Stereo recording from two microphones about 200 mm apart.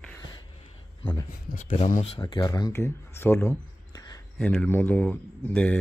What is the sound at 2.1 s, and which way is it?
Speech, 20° left (ahead or behind).